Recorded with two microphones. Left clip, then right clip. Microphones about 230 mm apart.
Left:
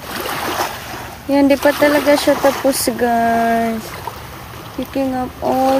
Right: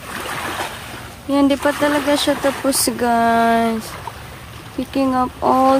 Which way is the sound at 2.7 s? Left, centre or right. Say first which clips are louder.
Left 2 dB; centre.